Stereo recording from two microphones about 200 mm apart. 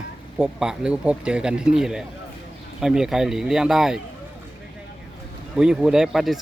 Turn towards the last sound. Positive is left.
turn(degrees=0)  # may be behind; listen again after turning